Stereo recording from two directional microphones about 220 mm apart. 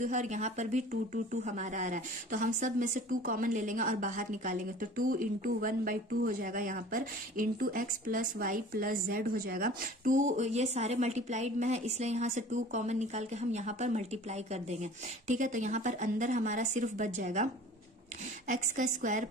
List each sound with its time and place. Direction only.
0.0 s speech: 35° right (ahead or behind)
18.5 s speech: 35° right (ahead or behind)